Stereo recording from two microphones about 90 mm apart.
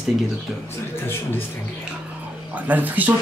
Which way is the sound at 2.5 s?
20° right (ahead or behind).